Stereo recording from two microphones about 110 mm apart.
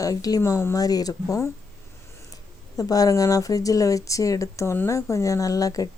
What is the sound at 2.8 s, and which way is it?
A woman's voice, 35° left (ahead or behind).